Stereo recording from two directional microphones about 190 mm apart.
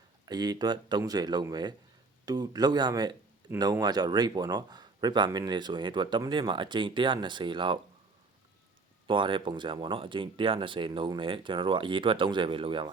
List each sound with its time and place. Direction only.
0.3 s speech: 20° right (ahead or behind)
9.0 s speech: 25° right (ahead or behind)